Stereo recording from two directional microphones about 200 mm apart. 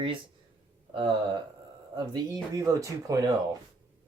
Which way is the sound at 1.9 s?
20° right (ahead or behind).